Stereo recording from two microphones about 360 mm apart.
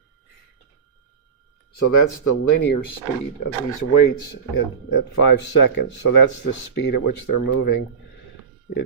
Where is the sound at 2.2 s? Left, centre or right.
Left.